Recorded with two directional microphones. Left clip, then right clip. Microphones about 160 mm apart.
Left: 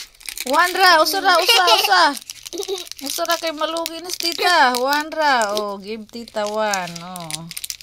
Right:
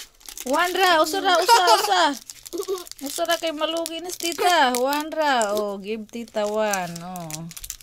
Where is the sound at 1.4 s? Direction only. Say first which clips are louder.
Left 2 dB; 40° right (ahead or behind).